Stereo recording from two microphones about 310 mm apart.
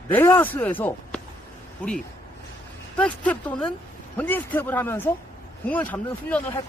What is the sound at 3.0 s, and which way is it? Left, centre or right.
A man's voice, centre.